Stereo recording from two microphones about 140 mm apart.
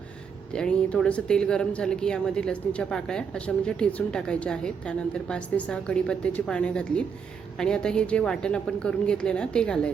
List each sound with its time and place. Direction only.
0.5 s speech: 5° left (ahead or behind)